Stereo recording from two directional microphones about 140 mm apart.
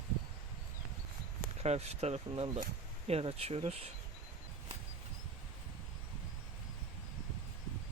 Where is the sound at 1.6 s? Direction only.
50° right (ahead or behind).